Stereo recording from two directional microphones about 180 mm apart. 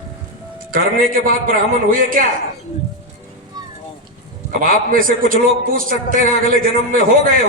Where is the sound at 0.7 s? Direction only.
50° right (ahead or behind).